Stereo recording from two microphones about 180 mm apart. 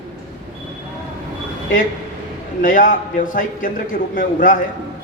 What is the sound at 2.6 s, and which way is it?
A woman's voice, 50° left (ahead or behind).